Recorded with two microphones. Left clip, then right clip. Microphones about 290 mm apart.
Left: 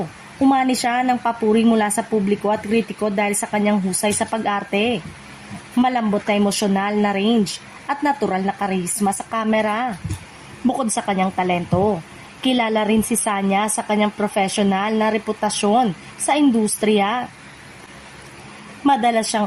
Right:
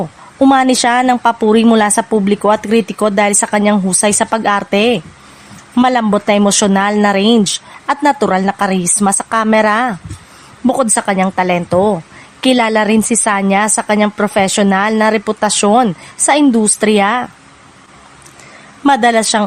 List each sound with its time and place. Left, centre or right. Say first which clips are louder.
0.4 s a woman's voice: right 8 dB; right
18.9 s a woman's voice: right 7 dB; right